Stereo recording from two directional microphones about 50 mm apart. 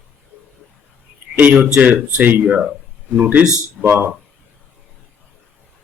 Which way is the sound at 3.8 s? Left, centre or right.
Right.